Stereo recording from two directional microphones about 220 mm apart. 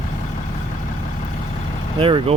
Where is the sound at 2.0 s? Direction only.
25° right (ahead or behind).